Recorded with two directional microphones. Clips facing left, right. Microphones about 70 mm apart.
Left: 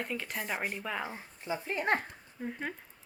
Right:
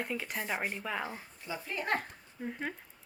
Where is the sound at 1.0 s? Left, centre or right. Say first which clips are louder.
Left 1 dB; left.